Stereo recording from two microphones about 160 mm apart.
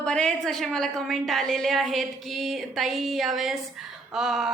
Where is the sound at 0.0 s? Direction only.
5° left (ahead or behind).